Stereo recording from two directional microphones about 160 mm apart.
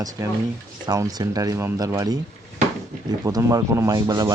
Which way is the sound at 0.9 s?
20° right (ahead or behind).